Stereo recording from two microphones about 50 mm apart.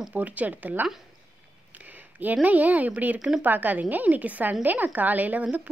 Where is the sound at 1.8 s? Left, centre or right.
Right.